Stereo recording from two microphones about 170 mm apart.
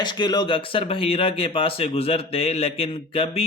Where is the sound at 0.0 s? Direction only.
25° left (ahead or behind).